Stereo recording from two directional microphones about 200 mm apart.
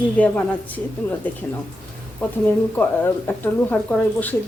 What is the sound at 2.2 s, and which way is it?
Speech, 5° left (ahead or behind).